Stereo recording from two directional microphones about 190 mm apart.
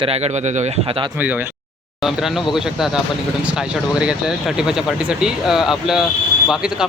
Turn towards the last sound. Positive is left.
turn(degrees=0)  # may be behind; listen again after turning